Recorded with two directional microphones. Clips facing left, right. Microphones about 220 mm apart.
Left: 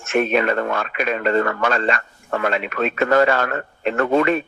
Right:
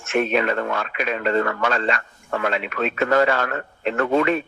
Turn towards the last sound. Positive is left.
turn(degrees=50)  # may be behind; listen again after turning